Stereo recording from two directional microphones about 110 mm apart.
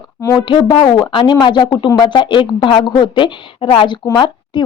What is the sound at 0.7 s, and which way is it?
A woman's voice, 45° left (ahead or behind).